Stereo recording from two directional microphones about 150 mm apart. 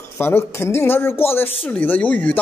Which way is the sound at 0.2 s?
15° left (ahead or behind).